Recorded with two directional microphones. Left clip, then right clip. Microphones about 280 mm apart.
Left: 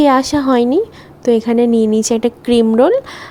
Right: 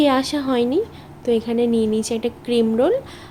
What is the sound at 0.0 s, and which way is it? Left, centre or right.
Speech, left.